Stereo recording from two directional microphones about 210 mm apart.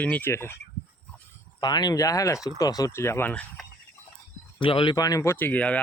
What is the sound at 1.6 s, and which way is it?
Speech, 20° left (ahead or behind).